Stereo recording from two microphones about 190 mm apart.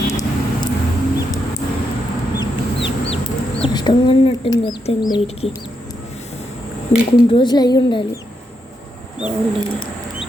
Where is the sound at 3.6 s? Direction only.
25° left (ahead or behind).